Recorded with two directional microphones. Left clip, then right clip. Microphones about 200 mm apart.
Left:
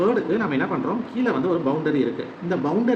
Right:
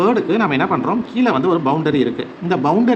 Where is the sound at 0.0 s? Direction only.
45° right (ahead or behind).